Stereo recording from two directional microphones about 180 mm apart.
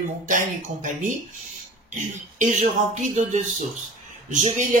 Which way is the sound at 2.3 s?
40° right (ahead or behind).